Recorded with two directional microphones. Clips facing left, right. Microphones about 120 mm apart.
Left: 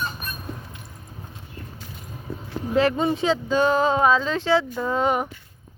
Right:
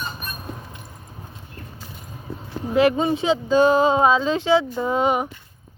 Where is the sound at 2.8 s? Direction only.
15° right (ahead or behind).